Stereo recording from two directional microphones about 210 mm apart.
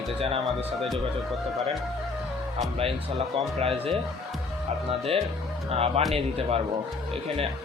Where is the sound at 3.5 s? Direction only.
30° right (ahead or behind).